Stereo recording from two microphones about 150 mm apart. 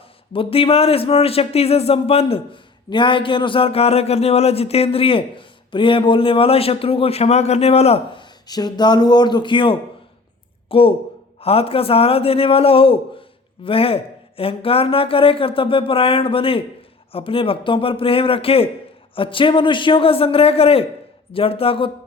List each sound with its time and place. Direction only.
0.3 s a man's voice: 40° left (ahead or behind)